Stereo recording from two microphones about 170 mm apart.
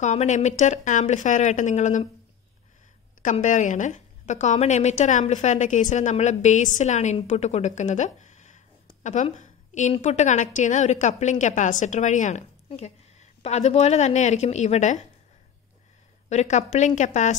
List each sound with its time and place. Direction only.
0.0 s a woman's voice: 40° left (ahead or behind)
3.2 s a woman's voice: 50° left (ahead or behind)
16.3 s a woman's voice: 45° left (ahead or behind)